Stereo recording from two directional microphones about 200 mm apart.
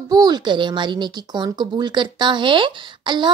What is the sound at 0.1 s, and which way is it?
A woman's voice, 20° right (ahead or behind).